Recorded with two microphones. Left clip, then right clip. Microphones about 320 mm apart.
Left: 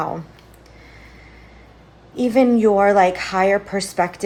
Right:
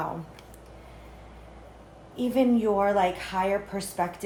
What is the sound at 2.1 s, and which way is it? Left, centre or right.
A woman's voice, left.